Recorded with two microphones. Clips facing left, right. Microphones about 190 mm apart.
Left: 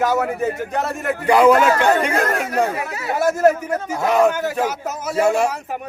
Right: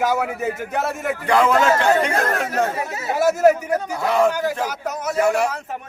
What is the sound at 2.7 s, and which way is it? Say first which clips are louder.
Speech: even; 25° right (ahead or behind).